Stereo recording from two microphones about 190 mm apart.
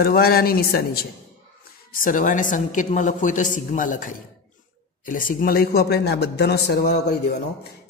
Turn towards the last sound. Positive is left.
turn(degrees=55)  # may be behind; listen again after turning